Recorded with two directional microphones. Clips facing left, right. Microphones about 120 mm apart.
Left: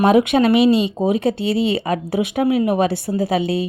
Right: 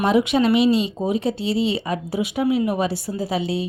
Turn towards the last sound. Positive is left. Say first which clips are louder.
# left 5 dB
turn(degrees=55)  # may be behind; listen again after turning